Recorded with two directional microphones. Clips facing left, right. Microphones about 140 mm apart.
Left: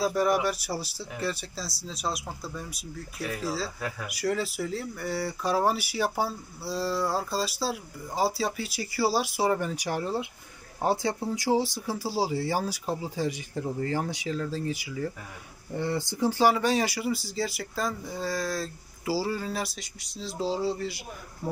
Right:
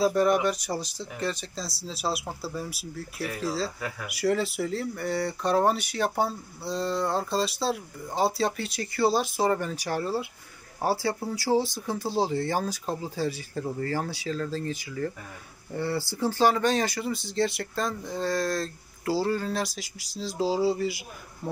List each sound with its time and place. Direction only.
0.0 s speech: 5° left (ahead or behind)